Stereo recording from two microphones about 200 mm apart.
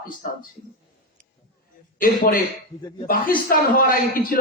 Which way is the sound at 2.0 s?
45° left (ahead or behind).